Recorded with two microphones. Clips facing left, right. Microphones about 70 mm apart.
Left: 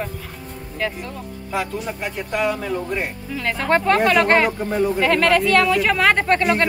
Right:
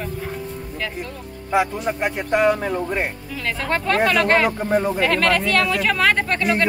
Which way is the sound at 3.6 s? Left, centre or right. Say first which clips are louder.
Left 4 dB; left.